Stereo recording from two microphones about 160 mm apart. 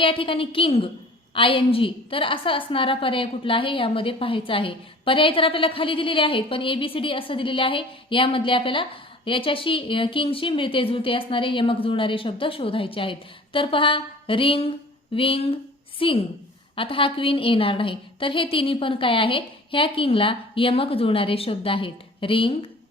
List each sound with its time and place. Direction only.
0.0 s a woman's voice: 35° left (ahead or behind)